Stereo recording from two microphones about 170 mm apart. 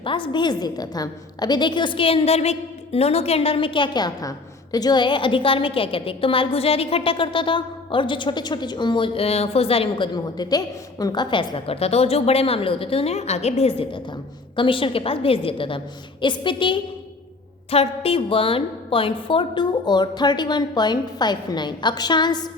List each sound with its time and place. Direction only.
0.0 s a woman's voice: 30° left (ahead or behind)